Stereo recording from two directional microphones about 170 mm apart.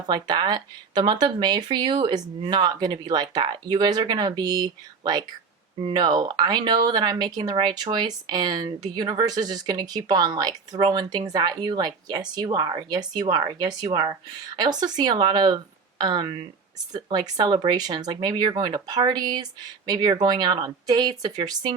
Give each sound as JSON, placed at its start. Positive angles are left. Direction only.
{"t": 0.1, "sound": "speech", "side_deg": -25}